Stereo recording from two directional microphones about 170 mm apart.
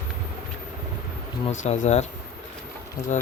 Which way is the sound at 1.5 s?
45° left (ahead or behind).